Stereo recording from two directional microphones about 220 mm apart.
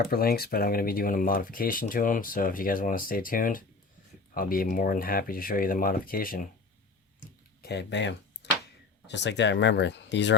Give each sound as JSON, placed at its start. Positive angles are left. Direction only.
{"t": 0.0, "sound": "speech", "side_deg": 45}
{"t": 7.6, "sound": "speech", "side_deg": 50}